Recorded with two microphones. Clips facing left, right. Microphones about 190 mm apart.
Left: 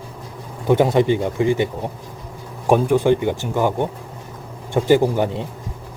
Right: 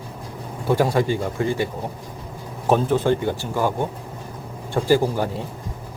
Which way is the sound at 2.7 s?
15° left (ahead or behind).